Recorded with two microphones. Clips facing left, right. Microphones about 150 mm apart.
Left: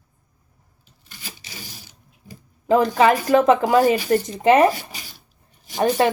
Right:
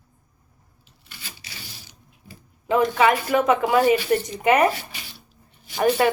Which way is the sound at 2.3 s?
40° left (ahead or behind).